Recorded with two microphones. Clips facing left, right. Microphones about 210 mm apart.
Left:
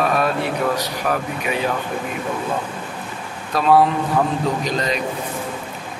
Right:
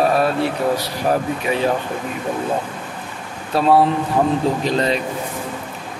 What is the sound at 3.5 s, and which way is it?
A man's voice, 30° right (ahead or behind).